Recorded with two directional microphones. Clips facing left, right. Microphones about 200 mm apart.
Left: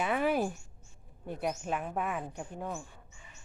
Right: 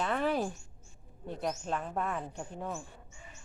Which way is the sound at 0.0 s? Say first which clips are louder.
Left 2 dB; 10° left (ahead or behind).